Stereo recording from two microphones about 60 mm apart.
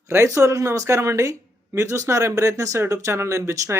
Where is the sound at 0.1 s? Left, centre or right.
Right.